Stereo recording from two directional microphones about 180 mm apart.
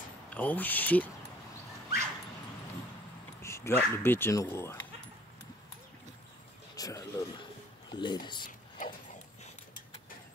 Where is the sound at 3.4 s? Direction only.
15° left (ahead or behind).